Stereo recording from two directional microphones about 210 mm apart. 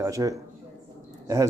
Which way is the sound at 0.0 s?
15° right (ahead or behind).